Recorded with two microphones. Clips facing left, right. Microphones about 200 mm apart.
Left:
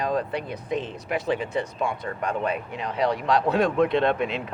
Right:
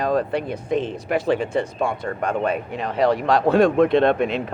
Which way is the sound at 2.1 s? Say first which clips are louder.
Right 4 dB; 45° right (ahead or behind).